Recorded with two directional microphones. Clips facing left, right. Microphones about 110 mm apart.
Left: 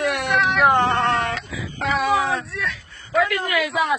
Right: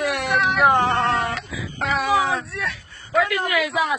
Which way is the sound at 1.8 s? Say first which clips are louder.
Even; centre (ahead or behind).